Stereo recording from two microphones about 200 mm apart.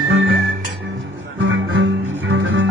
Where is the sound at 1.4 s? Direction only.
70° right (ahead or behind).